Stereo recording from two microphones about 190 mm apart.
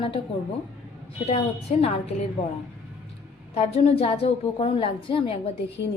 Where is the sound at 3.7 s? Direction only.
30° left (ahead or behind).